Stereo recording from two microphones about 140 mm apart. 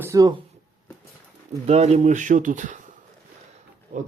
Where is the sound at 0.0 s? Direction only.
25° right (ahead or behind).